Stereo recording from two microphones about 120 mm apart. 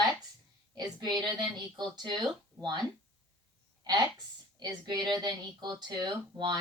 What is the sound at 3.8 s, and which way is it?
A woman's voice, 35° right (ahead or behind).